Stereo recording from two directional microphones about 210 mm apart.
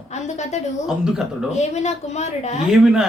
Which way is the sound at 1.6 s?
30° left (ahead or behind).